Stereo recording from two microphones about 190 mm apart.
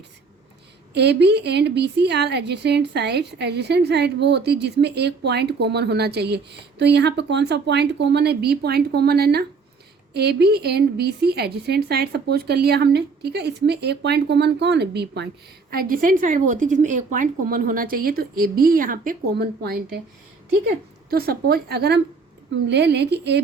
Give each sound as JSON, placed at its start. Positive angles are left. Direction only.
{"t": 0.9, "sound": "a woman's voice", "side_deg": -60}
{"t": 15.7, "sound": "a woman's voice", "side_deg": -50}
{"t": 21.1, "sound": "a woman's voice", "side_deg": -55}